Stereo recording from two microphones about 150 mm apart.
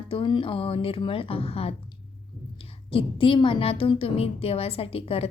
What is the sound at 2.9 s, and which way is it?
A woman's voice, 35° left (ahead or behind).